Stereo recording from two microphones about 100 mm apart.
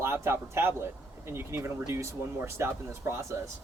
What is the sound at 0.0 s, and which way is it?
A man's voice, 25° right (ahead or behind).